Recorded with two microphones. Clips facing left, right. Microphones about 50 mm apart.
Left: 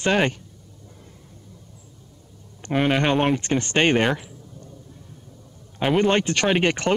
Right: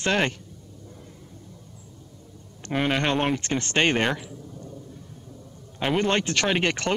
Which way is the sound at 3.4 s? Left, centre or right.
Left.